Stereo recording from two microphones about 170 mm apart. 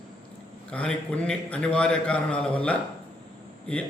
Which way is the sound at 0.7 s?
10° left (ahead or behind).